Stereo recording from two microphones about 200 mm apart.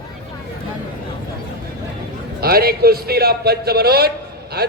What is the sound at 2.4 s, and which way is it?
A man's voice, 50° right (ahead or behind).